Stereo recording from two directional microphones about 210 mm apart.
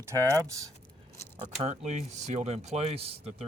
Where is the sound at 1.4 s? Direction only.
30° right (ahead or behind).